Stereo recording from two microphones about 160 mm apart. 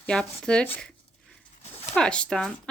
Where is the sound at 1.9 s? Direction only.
5° left (ahead or behind).